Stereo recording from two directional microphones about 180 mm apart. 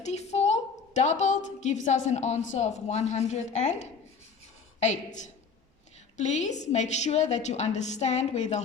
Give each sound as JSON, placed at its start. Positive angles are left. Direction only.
{"t": 0.0, "sound": "a woman's voice", "side_deg": 40}